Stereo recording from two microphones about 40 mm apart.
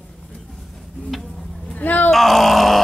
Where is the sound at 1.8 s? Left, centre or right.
Left.